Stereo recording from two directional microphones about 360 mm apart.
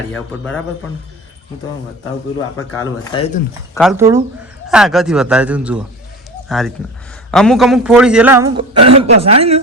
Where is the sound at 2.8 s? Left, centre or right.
Centre.